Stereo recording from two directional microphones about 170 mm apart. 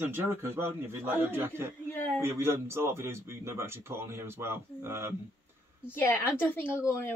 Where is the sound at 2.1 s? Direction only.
15° right (ahead or behind).